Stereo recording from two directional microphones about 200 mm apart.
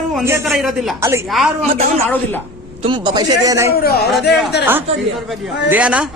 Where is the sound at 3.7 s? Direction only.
50° left (ahead or behind).